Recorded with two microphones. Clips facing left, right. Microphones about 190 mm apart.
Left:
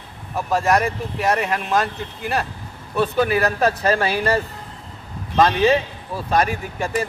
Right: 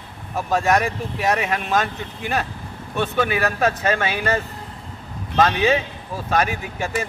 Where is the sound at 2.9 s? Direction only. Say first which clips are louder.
Left 3 dB; 35° left (ahead or behind).